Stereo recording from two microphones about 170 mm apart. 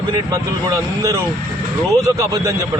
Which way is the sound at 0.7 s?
20° right (ahead or behind).